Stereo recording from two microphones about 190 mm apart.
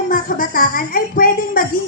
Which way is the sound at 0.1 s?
45° left (ahead or behind).